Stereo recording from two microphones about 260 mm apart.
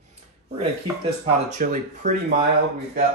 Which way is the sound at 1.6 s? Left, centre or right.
Right.